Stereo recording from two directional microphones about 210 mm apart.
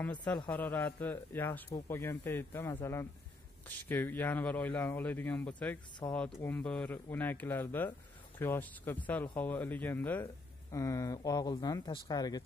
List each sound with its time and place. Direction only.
0.5 s speech: 10° left (ahead or behind)